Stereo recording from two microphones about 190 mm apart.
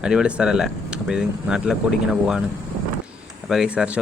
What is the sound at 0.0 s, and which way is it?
Speech, 5° right (ahead or behind).